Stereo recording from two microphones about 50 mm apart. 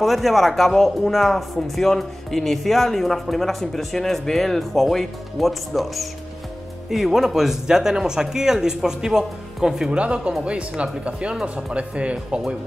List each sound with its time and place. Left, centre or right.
0.0 s speech: centre
9.8 s speech: right